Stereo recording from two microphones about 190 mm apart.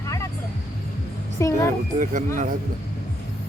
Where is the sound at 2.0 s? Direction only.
40° right (ahead or behind).